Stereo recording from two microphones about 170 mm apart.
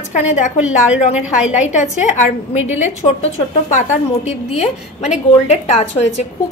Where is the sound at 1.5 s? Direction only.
45° left (ahead or behind).